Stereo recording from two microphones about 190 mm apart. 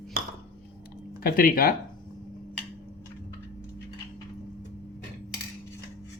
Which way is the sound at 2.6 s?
15° left (ahead or behind).